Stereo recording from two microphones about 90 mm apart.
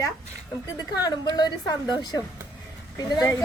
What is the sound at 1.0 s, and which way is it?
A woman's voice, 50° left (ahead or behind).